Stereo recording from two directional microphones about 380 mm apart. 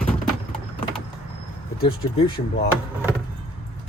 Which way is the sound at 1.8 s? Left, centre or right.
Centre.